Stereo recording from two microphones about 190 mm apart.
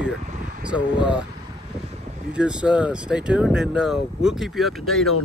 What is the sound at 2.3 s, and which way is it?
Speech, 5° right (ahead or behind).